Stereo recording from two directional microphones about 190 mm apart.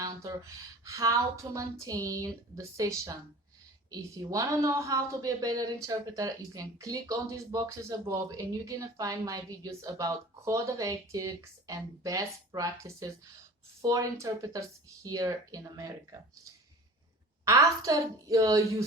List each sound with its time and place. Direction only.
0.0 s speech: 15° right (ahead or behind)
17.4 s speech: 15° right (ahead or behind)